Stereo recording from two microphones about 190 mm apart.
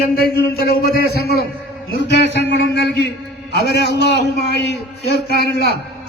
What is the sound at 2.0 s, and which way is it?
A man's voice, 65° left (ahead or behind).